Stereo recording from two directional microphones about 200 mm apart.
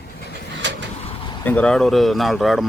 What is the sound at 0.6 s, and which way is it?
Vehicle, 65° right (ahead or behind).